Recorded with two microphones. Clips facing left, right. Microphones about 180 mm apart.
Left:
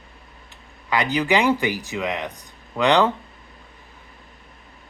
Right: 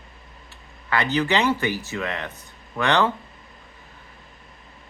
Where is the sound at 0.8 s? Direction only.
15° left (ahead or behind).